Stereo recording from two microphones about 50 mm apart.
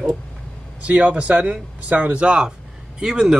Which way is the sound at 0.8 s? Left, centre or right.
Right.